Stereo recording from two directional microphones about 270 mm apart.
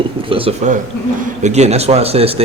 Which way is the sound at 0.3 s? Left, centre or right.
Right.